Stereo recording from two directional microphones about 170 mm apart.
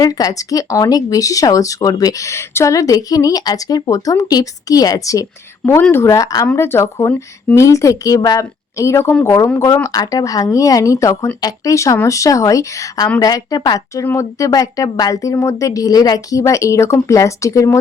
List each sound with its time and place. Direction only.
0.0 s speech: 20° left (ahead or behind)